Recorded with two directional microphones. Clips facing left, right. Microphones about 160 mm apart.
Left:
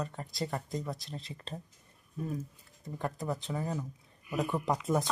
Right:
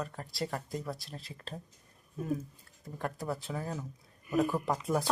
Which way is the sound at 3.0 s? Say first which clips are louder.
Left 1 dB; centre (ahead or behind).